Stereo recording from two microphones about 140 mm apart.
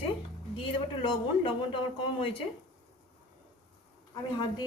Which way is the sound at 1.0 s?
35° left (ahead or behind).